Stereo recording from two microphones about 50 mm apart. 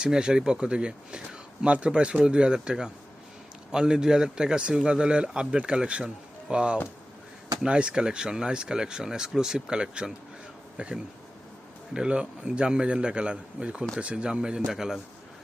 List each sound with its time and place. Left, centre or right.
0.0 s speech: centre